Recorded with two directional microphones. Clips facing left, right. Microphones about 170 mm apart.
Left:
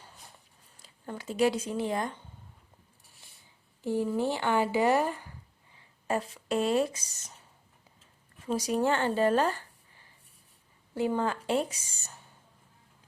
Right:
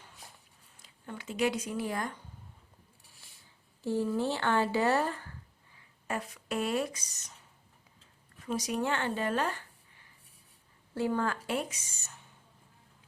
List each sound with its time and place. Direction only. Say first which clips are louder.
0.8 s speech: left 4 dB; 40° left (ahead or behind)
3.8 s speech: left 2 dB; 15° left (ahead or behind)
5.7 s speech: left 6 dB; 30° left (ahead or behind)
8.4 s speech: left 4 dB; 30° left (ahead or behind)
10.9 s speech: left 2 dB; 20° left (ahead or behind)